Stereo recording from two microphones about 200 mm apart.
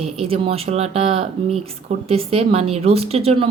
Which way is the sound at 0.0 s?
30° right (ahead or behind).